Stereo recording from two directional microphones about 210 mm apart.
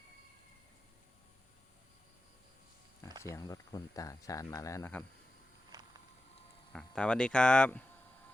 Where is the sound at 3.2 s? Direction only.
15° left (ahead or behind).